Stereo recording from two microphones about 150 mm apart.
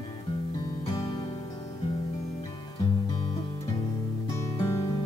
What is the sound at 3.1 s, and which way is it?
Guitar, 35° left (ahead or behind).